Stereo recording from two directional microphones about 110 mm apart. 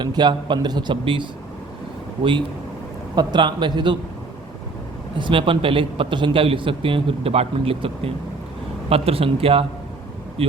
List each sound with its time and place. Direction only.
0.0 s a man's voice: 40° right (ahead or behind)
3.2 s a man's voice: 45° right (ahead or behind)
5.1 s a man's voice: 50° right (ahead or behind)